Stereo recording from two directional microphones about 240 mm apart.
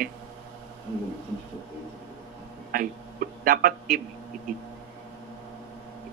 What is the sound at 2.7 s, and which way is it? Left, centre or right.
A man's voice, right.